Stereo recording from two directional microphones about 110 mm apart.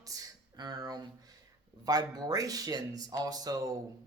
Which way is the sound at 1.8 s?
35° right (ahead or behind).